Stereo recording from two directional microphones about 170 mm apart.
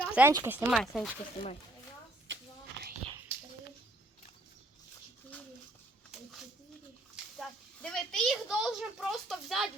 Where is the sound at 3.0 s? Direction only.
35° right (ahead or behind).